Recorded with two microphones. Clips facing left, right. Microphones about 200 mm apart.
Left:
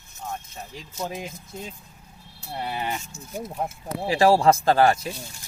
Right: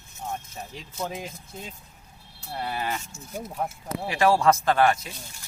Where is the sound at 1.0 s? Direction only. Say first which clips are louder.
Left 1 dB; 10° left (ahead or behind).